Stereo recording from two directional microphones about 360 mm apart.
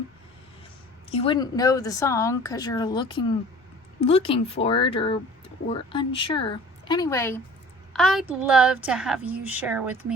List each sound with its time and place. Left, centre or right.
1.1 s a woman's voice: centre